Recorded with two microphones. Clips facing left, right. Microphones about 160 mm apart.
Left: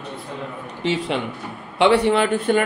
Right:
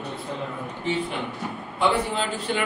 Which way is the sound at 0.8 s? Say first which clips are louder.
Left 5 dB; 90° left.